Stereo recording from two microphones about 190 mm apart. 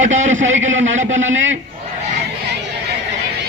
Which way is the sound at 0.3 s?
85° right.